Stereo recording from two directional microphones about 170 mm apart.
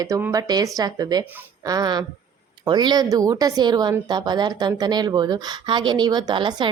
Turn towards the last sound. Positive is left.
turn(degrees=-25)  # may be behind; listen again after turning